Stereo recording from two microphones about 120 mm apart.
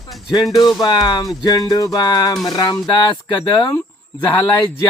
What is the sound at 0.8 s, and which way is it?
Music, 35° left (ahead or behind).